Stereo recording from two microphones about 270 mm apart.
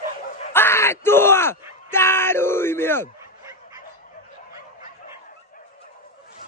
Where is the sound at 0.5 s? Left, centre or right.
Centre.